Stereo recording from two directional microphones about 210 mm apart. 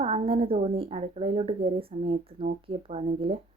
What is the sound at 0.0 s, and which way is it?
A woman's voice, 25° right (ahead or behind).